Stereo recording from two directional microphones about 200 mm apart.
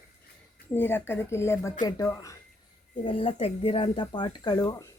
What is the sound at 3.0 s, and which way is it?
Speech, 25° left (ahead or behind).